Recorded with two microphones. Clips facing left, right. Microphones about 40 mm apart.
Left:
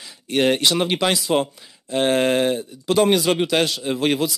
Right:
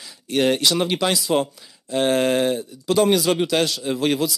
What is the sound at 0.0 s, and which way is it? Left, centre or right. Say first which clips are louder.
Speech: left 1 dB; left.